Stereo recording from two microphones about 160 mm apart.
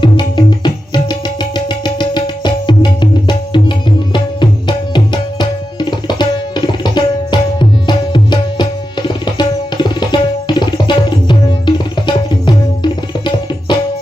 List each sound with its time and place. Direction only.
0.0 s music: 30° left (ahead or behind)
10.7 s tabla: 30° left (ahead or behind)